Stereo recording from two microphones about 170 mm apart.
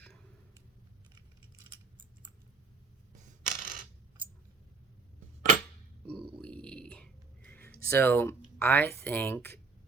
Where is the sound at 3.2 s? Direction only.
50° right (ahead or behind).